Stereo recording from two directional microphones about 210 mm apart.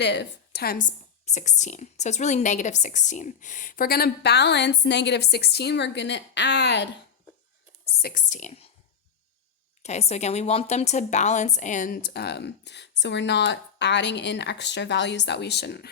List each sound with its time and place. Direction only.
0.0 s a woman's voice: 55° left (ahead or behind)
1.2 s a woman's voice: 35° left (ahead or behind); by 6.8 s 55° left (ahead or behind)
7.9 s speech: 45° left (ahead or behind)
9.8 s a woman's voice: 30° left (ahead or behind); by 15.9 s 50° left (ahead or behind)